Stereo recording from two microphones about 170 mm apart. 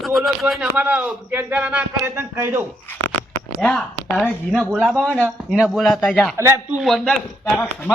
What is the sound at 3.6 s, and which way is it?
Speech, 5° left (ahead or behind).